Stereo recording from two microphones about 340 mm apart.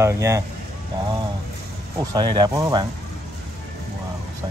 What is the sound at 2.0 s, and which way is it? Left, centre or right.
Speech, centre.